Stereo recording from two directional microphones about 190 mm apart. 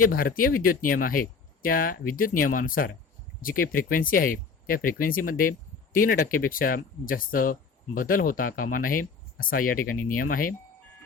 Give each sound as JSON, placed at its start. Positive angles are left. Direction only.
{"t": 0.0, "sound": "speech", "side_deg": 50}